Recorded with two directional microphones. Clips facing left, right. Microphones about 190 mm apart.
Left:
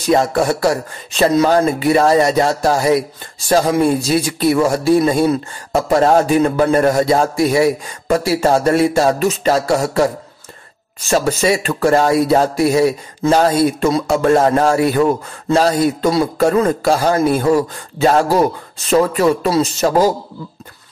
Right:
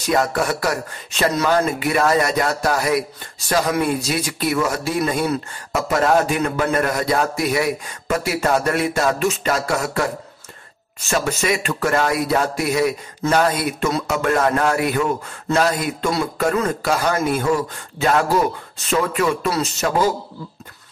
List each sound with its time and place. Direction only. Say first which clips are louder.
0.1 s a man's voice: left 5 dB; 25° left (ahead or behind)
11.1 s a man's voice: left 6 dB; 30° left (ahead or behind)